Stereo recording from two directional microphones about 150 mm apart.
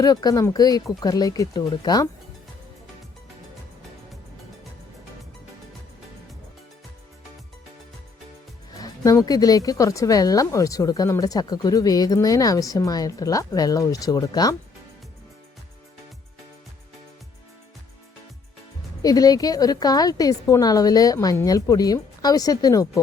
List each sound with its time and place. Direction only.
0.0 s speech: 25° left (ahead or behind)
8.8 s speech: 25° left (ahead or behind)
19.0 s speech: 25° left (ahead or behind)